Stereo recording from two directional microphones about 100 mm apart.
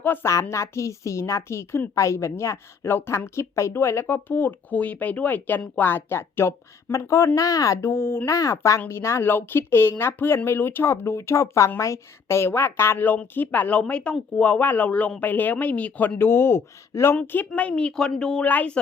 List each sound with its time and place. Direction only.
0.0 s a woman's voice: 20° left (ahead or behind)
17.2 s a woman's voice: 15° left (ahead or behind)